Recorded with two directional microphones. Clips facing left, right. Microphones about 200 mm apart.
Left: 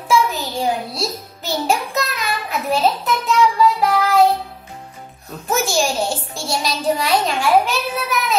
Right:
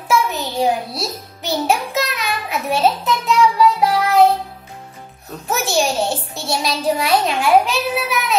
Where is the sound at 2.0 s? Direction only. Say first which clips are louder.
Right 1 dB; centre (ahead or behind).